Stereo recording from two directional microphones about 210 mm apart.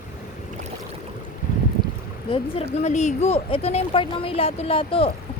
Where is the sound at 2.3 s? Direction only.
25° left (ahead or behind).